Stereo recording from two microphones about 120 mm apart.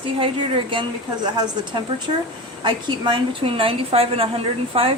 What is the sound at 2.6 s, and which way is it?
A woman's voice, 40° right (ahead or behind).